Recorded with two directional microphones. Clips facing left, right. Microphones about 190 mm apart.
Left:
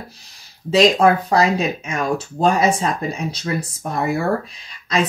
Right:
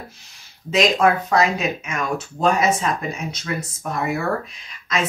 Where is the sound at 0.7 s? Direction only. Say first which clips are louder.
Left 4 dB; 30° left (ahead or behind).